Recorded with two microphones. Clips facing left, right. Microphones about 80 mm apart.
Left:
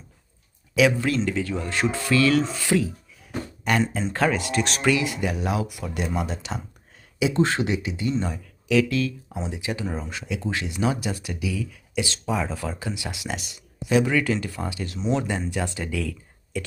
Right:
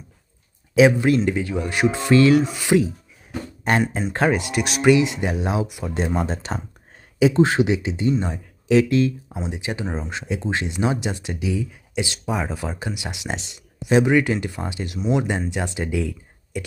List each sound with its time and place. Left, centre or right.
0.8 s speech: right
3.6 s speech: right
4.1 s speech: right
4.6 s speech: centre
4.9 s speech: right
7.3 s speech: centre
14.9 s speech: centre